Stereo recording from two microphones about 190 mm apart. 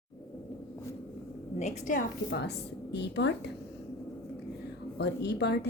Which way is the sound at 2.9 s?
65° left (ahead or behind).